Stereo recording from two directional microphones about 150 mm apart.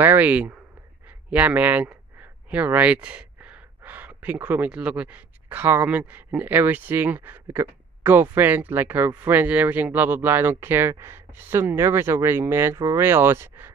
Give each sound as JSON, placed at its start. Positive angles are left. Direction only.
{"t": 0.0, "sound": "speech", "side_deg": -10}